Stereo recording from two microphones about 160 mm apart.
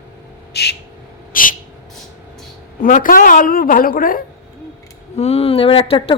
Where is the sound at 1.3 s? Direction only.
60° left (ahead or behind).